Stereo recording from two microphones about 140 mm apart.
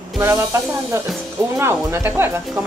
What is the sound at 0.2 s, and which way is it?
Speech, 20° right (ahead or behind).